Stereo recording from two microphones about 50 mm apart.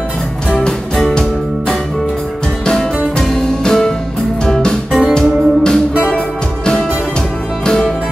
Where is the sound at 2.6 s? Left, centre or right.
Centre.